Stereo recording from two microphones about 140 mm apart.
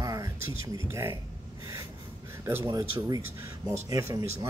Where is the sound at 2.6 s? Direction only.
25° right (ahead or behind).